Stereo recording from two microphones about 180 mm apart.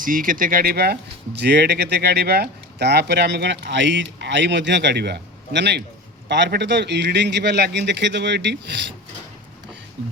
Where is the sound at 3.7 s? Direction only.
85° right.